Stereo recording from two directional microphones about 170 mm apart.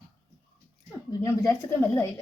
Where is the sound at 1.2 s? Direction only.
15° left (ahead or behind).